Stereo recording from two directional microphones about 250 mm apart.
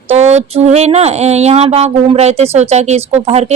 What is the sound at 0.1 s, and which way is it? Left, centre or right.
Speech, right.